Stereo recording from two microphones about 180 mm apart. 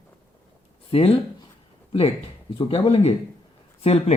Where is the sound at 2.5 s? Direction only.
30° left (ahead or behind).